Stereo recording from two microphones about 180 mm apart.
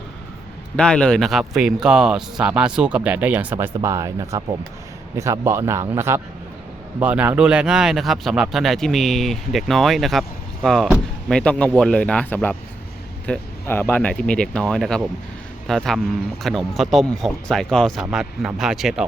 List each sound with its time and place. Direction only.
0.8 s a man's voice: 5° left (ahead or behind)